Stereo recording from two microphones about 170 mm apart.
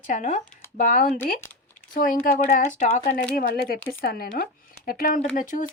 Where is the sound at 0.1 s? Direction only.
50° left (ahead or behind).